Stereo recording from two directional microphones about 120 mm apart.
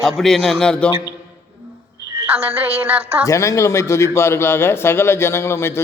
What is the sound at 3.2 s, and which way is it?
A man's voice, 25° left (ahead or behind).